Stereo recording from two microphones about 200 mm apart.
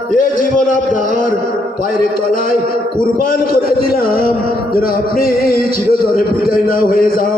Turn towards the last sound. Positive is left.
turn(degrees=45)  # may be behind; listen again after turning